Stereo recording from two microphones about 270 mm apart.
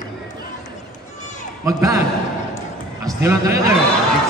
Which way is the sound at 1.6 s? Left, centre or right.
Centre.